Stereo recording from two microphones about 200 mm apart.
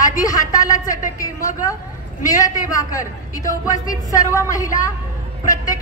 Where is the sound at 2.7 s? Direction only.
15° left (ahead or behind).